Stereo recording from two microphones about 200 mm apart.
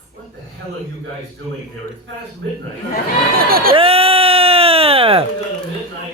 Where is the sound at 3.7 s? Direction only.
30° right (ahead or behind).